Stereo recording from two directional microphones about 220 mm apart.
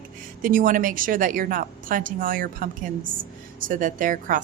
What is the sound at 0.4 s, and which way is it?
A woman's voice, 40° right (ahead or behind).